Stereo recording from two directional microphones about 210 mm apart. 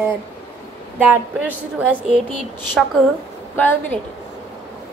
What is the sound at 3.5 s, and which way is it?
Speech, 10° left (ahead or behind).